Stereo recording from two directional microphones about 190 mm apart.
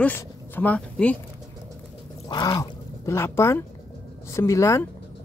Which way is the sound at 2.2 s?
25° left (ahead or behind).